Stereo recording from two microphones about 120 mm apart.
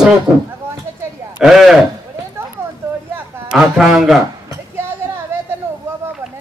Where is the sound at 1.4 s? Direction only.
Centre (ahead or behind).